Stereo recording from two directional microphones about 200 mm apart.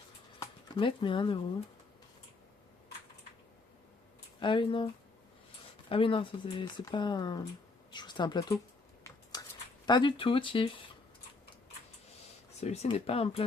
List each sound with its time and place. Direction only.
0.7 s speech: 25° left (ahead or behind)
4.4 s speech: 25° left (ahead or behind)
5.9 s speech: 25° left (ahead or behind)
9.8 s speech: 20° left (ahead or behind)
12.5 s speech: 30° left (ahead or behind)